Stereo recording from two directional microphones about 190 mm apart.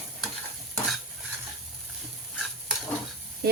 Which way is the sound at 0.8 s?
Centre (ahead or behind).